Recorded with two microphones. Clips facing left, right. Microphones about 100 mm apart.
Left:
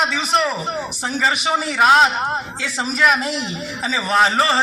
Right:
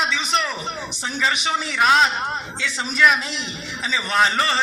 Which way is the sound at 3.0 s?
45° left (ahead or behind).